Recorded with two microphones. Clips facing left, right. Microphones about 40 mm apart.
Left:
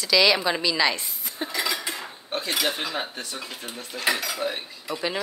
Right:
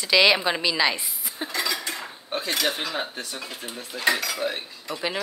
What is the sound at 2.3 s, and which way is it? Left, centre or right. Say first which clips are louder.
Dishes: right 1 dB; centre.